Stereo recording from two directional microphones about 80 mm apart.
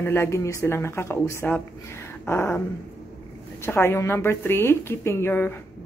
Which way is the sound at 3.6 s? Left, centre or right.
Left.